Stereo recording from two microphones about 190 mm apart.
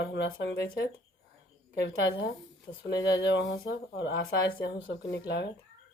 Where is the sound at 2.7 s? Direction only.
55° left (ahead or behind).